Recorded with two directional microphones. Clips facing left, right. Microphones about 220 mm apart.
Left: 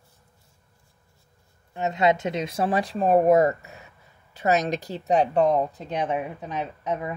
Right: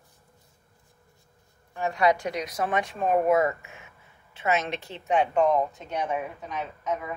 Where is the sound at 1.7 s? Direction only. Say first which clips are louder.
Left 2 dB; 20° left (ahead or behind).